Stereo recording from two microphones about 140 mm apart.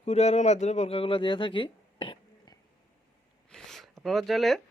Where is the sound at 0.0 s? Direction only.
50° left (ahead or behind).